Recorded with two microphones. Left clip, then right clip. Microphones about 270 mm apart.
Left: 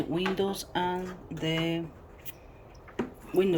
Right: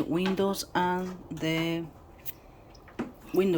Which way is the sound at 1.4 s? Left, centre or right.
Centre.